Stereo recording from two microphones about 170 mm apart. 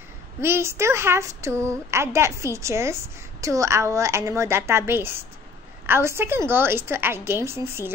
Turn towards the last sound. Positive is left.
turn(degrees=-15)  # may be behind; listen again after turning